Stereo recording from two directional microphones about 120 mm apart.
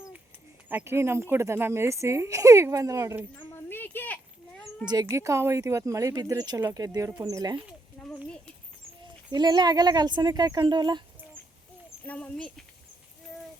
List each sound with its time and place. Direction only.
0.7 s speech: 20° right (ahead or behind)
3.3 s a sound: 15° left (ahead or behind)
5.0 s speech: 25° right (ahead or behind)
8.0 s a sound: 5° left (ahead or behind)
9.3 s speech: 35° right (ahead or behind)
12.0 s speech: 10° left (ahead or behind)